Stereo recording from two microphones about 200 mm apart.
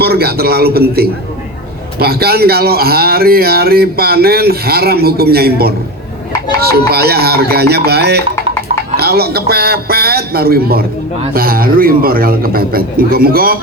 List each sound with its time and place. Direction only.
0.0 s speech: 50° right (ahead or behind)